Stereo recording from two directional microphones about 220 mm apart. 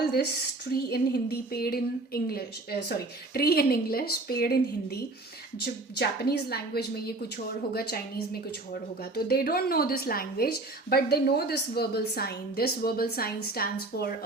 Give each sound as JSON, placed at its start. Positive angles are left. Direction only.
{"t": 0.7, "sound": "speech", "side_deg": 45}